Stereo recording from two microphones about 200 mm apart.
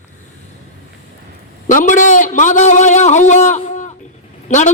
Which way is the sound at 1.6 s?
40° left (ahead or behind).